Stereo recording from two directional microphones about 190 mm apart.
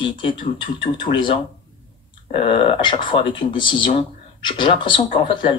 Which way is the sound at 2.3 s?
30° left (ahead or behind).